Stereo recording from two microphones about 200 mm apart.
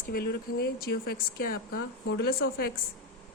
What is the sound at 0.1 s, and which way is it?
Speech, 50° left (ahead or behind).